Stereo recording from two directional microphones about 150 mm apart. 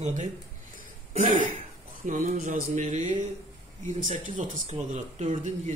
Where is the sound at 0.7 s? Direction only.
60° right (ahead or behind).